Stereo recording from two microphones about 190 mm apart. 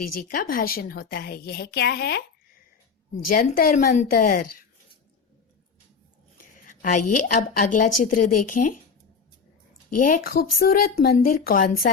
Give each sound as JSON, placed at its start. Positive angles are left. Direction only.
{"t": 0.2, "sound": "a woman's voice", "side_deg": 50}
{"t": 3.2, "sound": "speech", "side_deg": 50}
{"t": 6.3, "sound": "a woman's voice", "side_deg": 45}
{"t": 10.1, "sound": "speech", "side_deg": 50}